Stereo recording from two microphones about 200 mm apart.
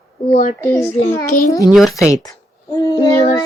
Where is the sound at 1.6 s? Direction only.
Centre (ahead or behind).